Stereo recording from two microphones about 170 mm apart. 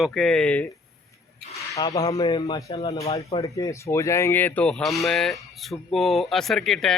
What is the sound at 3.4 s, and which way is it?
A man's voice, 20° left (ahead or behind).